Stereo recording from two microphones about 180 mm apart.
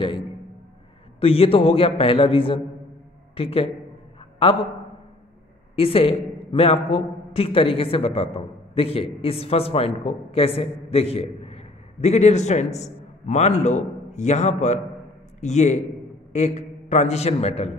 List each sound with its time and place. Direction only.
1.2 s a man's voice: 30° left (ahead or behind)
5.8 s a man's voice: 35° left (ahead or behind)